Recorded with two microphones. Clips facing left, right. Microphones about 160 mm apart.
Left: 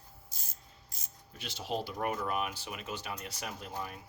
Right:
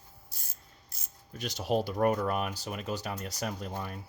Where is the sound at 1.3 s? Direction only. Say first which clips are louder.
Right 7 dB; 45° right (ahead or behind).